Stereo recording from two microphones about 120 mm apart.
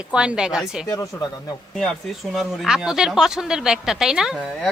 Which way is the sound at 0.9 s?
30° left (ahead or behind).